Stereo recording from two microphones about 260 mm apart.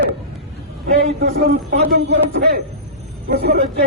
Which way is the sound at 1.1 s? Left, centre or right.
Right.